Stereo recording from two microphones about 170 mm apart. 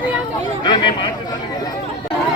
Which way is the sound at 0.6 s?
25° left (ahead or behind).